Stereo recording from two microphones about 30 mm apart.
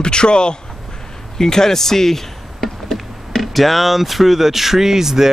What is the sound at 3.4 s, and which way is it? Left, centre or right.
Speech, centre.